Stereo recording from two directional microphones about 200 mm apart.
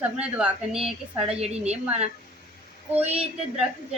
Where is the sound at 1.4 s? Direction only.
30° right (ahead or behind).